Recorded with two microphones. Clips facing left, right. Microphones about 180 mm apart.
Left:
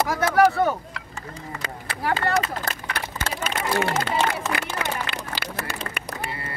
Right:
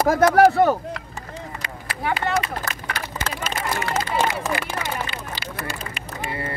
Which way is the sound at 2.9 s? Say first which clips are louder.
Even; 60° left (ahead or behind).